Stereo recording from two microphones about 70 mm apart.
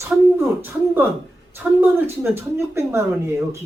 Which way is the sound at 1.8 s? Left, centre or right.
Right.